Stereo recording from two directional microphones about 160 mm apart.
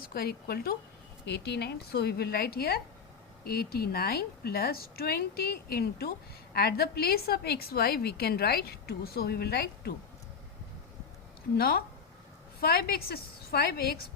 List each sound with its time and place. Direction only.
0.1 s a woman's voice: 75° left (ahead or behind)
1.2 s a woman's voice: 90° left
11.5 s a woman's voice: 75° left (ahead or behind)